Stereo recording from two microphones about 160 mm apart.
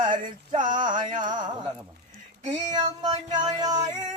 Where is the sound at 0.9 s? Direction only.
55° right (ahead or behind).